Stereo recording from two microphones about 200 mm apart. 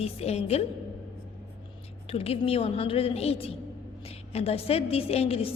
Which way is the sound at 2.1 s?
30° left (ahead or behind).